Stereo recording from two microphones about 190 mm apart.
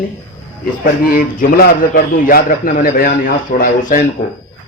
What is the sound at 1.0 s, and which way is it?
A man's voice, 50° left (ahead or behind).